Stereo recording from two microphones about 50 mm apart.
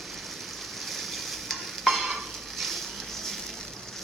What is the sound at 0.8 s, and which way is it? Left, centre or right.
Stir, centre.